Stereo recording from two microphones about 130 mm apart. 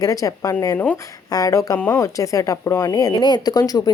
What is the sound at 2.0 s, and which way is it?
Speech, 25° left (ahead or behind).